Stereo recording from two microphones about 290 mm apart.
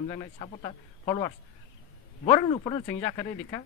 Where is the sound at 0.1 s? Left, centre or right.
Centre.